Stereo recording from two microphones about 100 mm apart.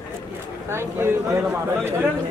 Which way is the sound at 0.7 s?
25° right (ahead or behind).